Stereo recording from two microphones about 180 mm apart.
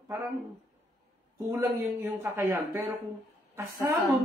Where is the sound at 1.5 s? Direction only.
15° right (ahead or behind).